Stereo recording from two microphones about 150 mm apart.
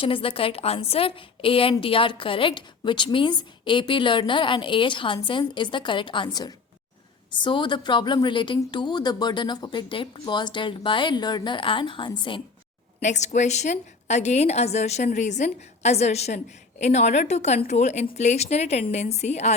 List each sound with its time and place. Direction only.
0.0 s a woman's voice: 35° left (ahead or behind)
13.0 s a woman's voice: 50° left (ahead or behind)